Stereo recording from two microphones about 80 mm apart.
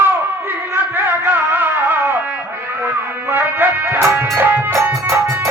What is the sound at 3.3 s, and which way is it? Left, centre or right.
Music, right.